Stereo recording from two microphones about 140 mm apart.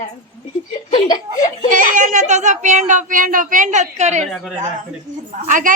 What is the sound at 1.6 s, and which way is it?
Speech, 70° right (ahead or behind).